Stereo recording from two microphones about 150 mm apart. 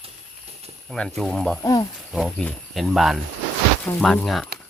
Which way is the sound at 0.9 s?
5° left (ahead or behind).